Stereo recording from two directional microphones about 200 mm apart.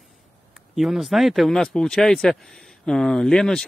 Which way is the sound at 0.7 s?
Centre (ahead or behind).